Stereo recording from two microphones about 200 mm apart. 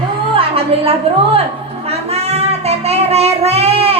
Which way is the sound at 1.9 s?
30° right (ahead or behind).